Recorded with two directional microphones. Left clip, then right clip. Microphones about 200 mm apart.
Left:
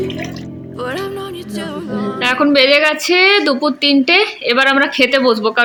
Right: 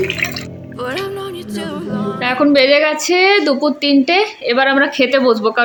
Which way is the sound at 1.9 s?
Centre (ahead or behind).